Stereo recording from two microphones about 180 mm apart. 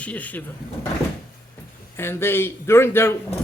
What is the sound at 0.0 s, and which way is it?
Speech, 10° left (ahead or behind).